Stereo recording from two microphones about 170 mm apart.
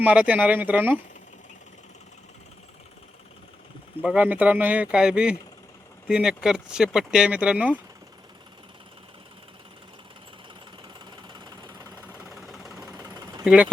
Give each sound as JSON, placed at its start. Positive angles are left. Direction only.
{"t": 0.0, "sound": "speech", "side_deg": -10}
{"t": 4.0, "sound": "speech", "side_deg": -5}
{"t": 11.0, "sound": "jackhammer", "side_deg": -25}
{"t": 12.1, "sound": "engine", "side_deg": 0}
{"t": 13.4, "sound": "speech", "side_deg": -5}